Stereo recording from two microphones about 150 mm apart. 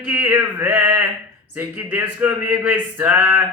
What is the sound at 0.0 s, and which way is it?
Speech, 10° right (ahead or behind).